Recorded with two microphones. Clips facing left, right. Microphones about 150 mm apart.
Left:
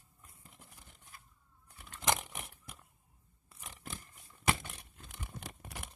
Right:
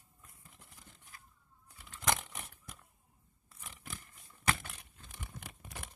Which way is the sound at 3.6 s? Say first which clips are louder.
Left 2 dB; 30° left (ahead or behind).